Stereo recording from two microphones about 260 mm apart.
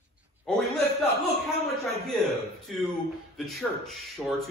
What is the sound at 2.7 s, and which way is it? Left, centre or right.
A man's voice, centre.